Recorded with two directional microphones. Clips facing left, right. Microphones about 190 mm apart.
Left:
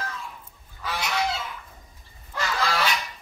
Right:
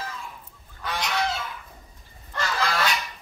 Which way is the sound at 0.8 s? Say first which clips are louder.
Even; 5° left (ahead or behind).